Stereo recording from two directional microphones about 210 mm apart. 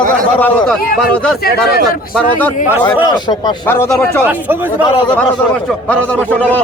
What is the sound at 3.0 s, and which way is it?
Speech, 20° left (ahead or behind).